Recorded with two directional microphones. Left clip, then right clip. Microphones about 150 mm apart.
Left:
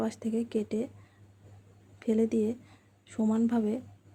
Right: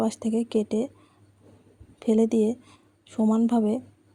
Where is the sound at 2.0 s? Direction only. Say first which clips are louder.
Right 6 dB; 35° right (ahead or behind).